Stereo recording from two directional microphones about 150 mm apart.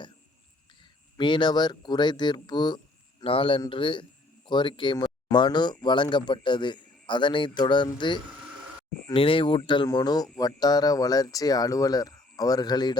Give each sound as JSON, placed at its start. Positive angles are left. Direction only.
{"t": 1.2, "sound": "a man's voice", "side_deg": 30}